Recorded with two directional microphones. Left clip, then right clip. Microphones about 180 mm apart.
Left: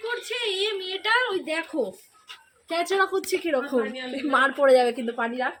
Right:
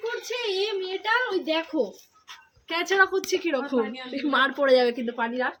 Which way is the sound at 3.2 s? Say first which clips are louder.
Left 1 dB; 45° right (ahead or behind).